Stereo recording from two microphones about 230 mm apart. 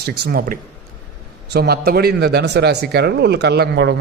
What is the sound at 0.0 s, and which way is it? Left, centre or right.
A man's voice, right.